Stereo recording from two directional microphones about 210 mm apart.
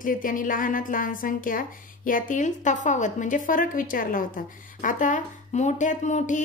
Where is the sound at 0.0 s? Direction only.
40° left (ahead or behind).